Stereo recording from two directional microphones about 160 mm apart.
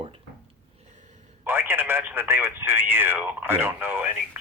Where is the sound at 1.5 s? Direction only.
15° right (ahead or behind).